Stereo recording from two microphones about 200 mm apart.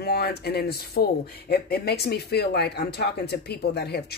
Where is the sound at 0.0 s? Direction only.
55° left (ahead or behind).